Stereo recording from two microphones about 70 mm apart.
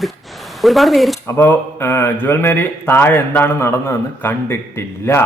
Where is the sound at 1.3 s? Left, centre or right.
Left.